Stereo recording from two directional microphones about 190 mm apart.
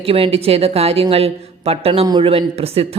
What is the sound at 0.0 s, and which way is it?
A woman's voice, 30° right (ahead or behind).